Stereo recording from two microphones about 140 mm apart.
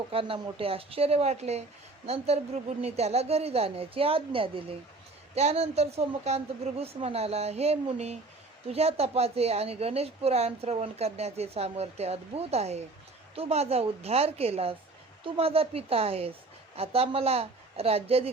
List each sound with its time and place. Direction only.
0.1 s a woman's voice: 40° right (ahead or behind)